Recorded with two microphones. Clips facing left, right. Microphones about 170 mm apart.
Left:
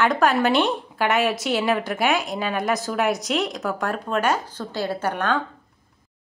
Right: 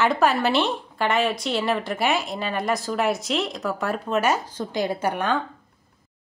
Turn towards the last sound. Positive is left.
turn(degrees=-10)  # may be behind; listen again after turning